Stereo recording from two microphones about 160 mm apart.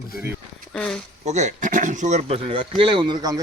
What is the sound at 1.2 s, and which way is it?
Speech, 50° right (ahead or behind).